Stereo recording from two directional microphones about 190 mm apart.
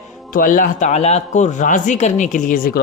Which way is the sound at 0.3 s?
45° left (ahead or behind).